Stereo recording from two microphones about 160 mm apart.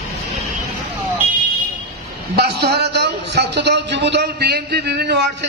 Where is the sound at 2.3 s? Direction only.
85° right.